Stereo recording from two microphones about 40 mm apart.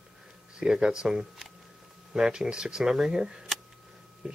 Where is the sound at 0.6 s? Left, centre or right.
Centre.